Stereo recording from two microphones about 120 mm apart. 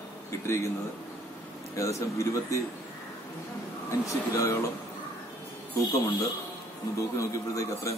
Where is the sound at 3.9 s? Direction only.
25° left (ahead or behind).